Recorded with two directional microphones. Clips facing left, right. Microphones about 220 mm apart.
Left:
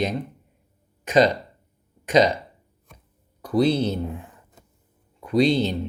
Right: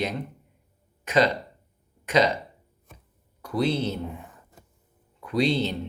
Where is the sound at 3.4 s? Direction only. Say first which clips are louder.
Left 5 dB; 15° left (ahead or behind).